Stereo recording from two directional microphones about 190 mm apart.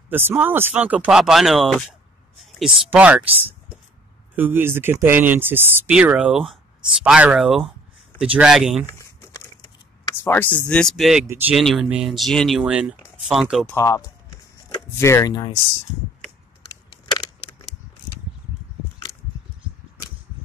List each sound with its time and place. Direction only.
0.1 s speech: 10° right (ahead or behind)
4.4 s speech: 10° right (ahead or behind)
8.8 s a sound: 15° left (ahead or behind)
10.0 s speech: 10° left (ahead or behind)
11.2 s speech: 10° right (ahead or behind)
11.5 s speech: centre (ahead or behind)
13.7 s speech: 20° left (ahead or behind)
17.0 s a sound: 25° left (ahead or behind)